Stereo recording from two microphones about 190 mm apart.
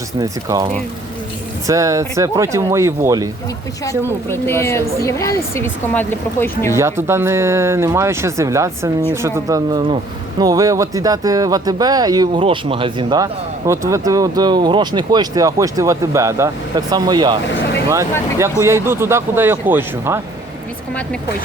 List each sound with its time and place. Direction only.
0.2 s speech: 20° right (ahead or behind)
3.8 s a woman's voice: 10° left (ahead or behind)
6.7 s speech: 15° right (ahead or behind)
17.5 s speech: 65° left (ahead or behind)
18.3 s speech: 15° right (ahead or behind)